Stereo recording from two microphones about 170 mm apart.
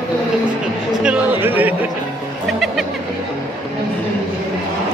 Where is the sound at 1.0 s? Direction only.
10° right (ahead or behind).